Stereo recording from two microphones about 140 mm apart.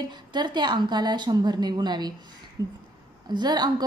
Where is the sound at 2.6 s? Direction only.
25° right (ahead or behind).